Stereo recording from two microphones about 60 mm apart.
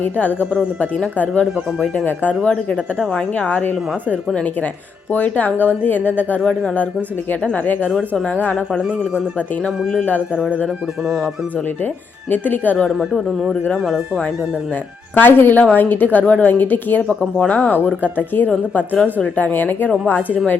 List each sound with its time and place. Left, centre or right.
0.0 s speech: left
0.5 s speech: centre
2.0 s speech: left
5.1 s speech: left
12.3 s speech: left
15.1 s speech: left